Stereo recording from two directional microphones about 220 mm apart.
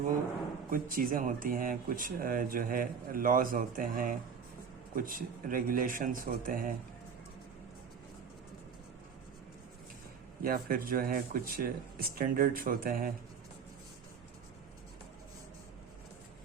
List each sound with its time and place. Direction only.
0.7 s speech: 40° right (ahead or behind)
10.4 s speech: 40° right (ahead or behind)